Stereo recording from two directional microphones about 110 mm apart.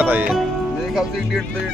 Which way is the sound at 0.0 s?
15° right (ahead or behind).